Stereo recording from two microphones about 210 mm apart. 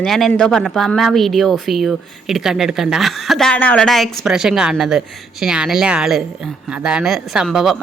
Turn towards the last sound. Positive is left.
turn(degrees=0)  # may be behind; listen again after turning